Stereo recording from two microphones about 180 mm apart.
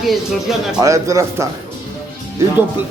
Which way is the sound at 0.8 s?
15° right (ahead or behind).